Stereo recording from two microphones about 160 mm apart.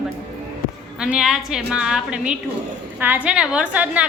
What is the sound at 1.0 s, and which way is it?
A woman's voice, 5° right (ahead or behind).